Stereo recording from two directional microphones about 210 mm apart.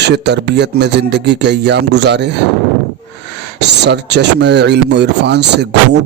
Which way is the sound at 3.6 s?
55° right (ahead or behind).